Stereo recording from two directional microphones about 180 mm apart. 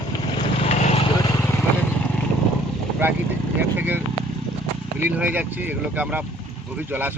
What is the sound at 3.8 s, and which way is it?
Vehicle, 10° right (ahead or behind).